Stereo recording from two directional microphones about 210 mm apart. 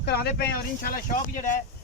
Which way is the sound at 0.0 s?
50° left (ahead or behind).